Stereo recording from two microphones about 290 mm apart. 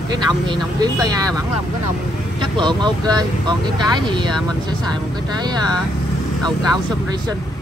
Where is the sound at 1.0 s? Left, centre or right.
Centre.